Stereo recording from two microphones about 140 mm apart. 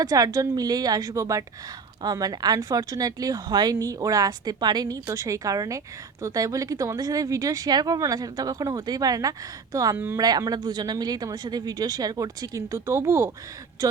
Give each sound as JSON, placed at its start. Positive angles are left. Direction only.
{"t": 0.0, "sound": "speech", "side_deg": -25}